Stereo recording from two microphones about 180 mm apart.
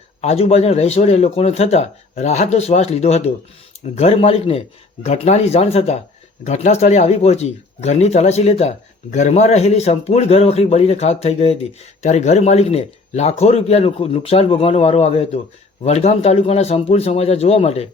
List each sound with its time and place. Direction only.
0.2 s speech: 35° left (ahead or behind)